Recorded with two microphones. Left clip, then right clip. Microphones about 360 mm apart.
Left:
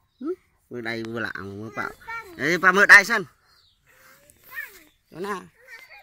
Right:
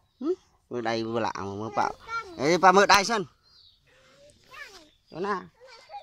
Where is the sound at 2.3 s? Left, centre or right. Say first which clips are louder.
Even; centre.